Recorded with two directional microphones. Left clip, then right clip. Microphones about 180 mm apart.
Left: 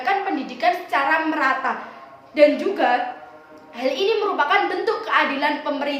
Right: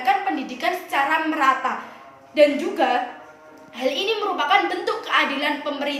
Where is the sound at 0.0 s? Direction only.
15° left (ahead or behind).